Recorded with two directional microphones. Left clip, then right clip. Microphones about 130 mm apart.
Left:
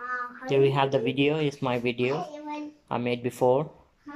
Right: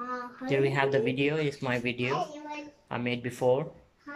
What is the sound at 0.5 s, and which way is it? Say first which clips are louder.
Speech: left 4 dB; 20° left (ahead or behind).